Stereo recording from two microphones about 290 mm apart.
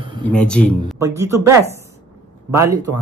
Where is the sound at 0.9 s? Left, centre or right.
Centre.